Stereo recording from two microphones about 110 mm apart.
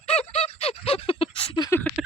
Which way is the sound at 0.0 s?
75° left (ahead or behind).